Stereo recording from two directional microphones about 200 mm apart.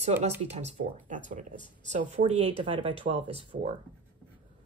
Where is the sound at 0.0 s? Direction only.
35° right (ahead or behind).